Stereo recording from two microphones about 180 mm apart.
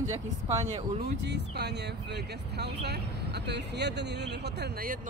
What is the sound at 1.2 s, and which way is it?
Speech, 70° right (ahead or behind).